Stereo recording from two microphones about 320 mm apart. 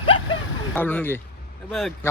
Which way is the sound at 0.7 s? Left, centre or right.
Centre.